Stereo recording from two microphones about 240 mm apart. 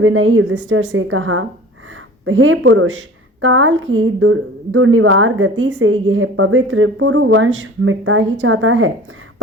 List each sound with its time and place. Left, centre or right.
0.0 s a woman's voice: right